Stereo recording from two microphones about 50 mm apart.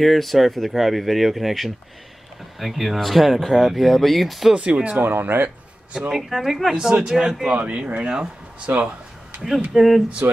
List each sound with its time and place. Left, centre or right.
0.0 s speech: centre
4.6 s speech: right
5.0 s speech: right
5.9 s a man's voice: centre
6.7 s a man's voice: centre
7.6 s speech: right
9.8 s speech: centre